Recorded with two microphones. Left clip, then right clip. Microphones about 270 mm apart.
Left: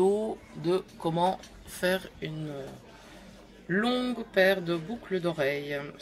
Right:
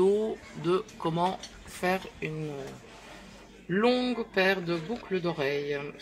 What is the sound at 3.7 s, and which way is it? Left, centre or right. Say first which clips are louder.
A man's voice: right 3 dB; left.